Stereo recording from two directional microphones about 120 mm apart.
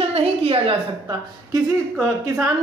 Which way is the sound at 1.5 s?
25° right (ahead or behind).